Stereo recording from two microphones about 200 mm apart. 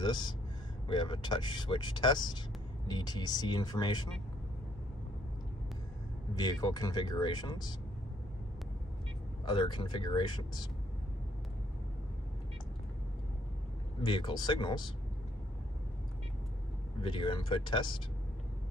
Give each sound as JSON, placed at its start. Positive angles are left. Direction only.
{"t": 0.0, "sound": "speech", "side_deg": 20}
{"t": 6.3, "sound": "speech", "side_deg": 20}
{"t": 9.5, "sound": "speech", "side_deg": 25}
{"t": 14.0, "sound": "speech", "side_deg": 25}
{"t": 17.0, "sound": "speech", "side_deg": 25}